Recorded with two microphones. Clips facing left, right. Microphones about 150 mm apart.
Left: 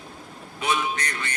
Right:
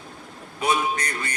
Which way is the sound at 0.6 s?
35° right (ahead or behind).